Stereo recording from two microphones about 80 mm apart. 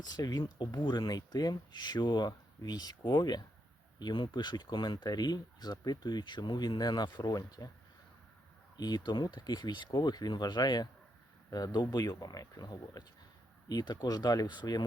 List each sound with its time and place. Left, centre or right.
0.0 s speech: left
2.6 s speech: left
4.0 s speech: left
7.2 s speech: left
8.7 s speech: left